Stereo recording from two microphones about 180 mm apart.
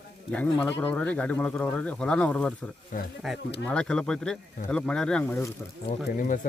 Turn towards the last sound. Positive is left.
turn(degrees=50)  # may be behind; listen again after turning